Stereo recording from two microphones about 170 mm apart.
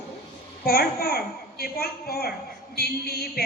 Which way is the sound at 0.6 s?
65° left (ahead or behind).